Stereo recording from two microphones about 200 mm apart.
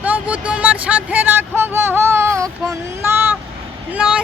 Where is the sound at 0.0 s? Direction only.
5° right (ahead or behind).